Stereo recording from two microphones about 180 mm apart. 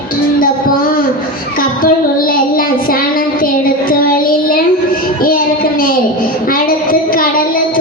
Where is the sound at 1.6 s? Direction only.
50° left (ahead or behind).